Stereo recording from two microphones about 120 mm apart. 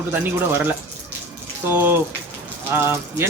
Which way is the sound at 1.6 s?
20° right (ahead or behind).